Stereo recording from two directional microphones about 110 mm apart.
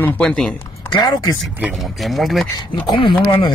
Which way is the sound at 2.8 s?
50° left (ahead or behind).